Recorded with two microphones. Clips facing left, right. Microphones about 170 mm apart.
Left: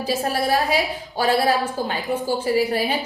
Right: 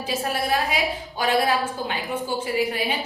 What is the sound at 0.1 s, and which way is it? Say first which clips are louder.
A woman's voice: left 3 dB; 35° left (ahead or behind).